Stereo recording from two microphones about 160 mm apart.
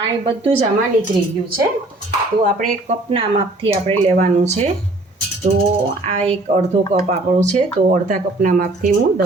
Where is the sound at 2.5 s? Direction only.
55° right (ahead or behind).